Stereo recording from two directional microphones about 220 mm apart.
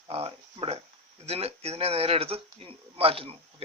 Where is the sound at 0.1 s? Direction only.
25° right (ahead or behind).